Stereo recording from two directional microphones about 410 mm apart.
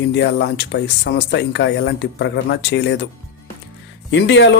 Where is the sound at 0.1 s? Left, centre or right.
Left.